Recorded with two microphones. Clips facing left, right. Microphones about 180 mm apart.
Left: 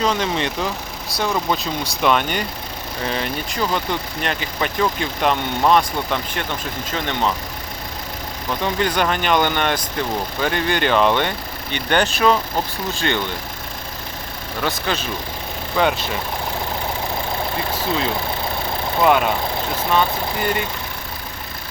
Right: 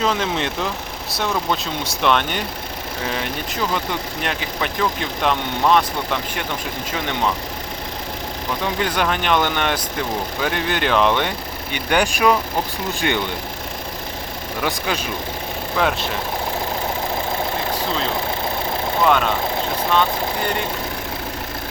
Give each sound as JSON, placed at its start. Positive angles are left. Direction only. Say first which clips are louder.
{"t": 0.0, "sound": "speech", "louder": "left 1 dB", "side_deg": 0}
{"t": 8.6, "sound": "speech", "louder": "left 2 dB", "side_deg": 0}
{"t": 14.6, "sound": "speech", "louder": "even", "side_deg": -10}
{"t": 15.7, "sound": "speech", "louder": "left 2 dB", "side_deg": 0}
{"t": 19.0, "sound": "speech", "louder": "left 2 dB", "side_deg": 10}